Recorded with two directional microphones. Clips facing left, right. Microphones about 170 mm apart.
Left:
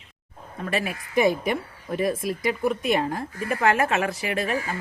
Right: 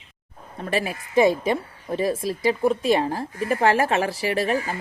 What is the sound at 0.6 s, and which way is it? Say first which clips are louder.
Speech: right 2 dB; 30° right (ahead or behind).